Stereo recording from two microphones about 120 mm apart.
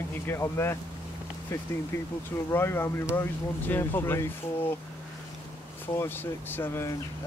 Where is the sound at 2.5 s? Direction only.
20° left (ahead or behind).